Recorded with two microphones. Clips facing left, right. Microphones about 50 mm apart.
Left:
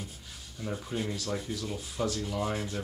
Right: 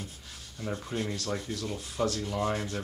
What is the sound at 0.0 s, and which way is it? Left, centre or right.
Rub, centre.